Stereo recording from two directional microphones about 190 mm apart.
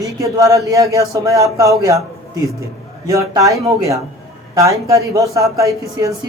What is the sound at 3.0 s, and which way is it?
Speech, 15° right (ahead or behind).